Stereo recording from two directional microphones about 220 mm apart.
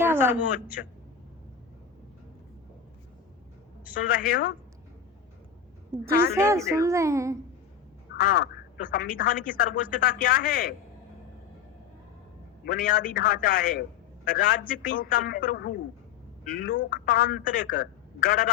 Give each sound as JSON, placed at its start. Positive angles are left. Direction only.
{"t": 0.0, "sound": "speech", "side_deg": -10}
{"t": 3.9, "sound": "speech", "side_deg": 40}
{"t": 6.3, "sound": "a woman's voice", "side_deg": -15}
{"t": 8.1, "sound": "speech", "side_deg": 40}
{"t": 12.6, "sound": "speech", "side_deg": 40}